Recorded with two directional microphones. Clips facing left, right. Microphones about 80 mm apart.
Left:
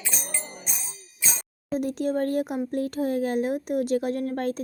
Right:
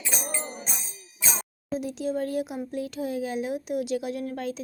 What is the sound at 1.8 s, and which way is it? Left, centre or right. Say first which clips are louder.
Speech: left 4 dB; left.